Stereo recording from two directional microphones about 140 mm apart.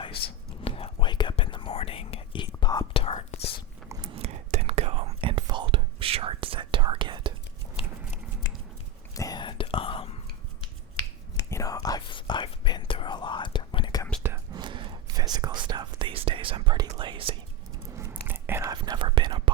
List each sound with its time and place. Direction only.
0.6 s whispering: 40° left (ahead or behind)
3.0 s whispering: 45° left (ahead or behind)
4.1 s whispering: 50° right (ahead or behind)
9.1 s whispering: 25° left (ahead or behind)
11.5 s whispering: 25° left (ahead or behind)
14.5 s whispering: 35° right (ahead or behind)
17.9 s whispering: 15° right (ahead or behind)
18.7 s whispering: 30° right (ahead or behind)